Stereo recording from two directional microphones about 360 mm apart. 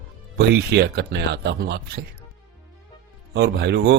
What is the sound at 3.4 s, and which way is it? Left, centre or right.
Speech, right.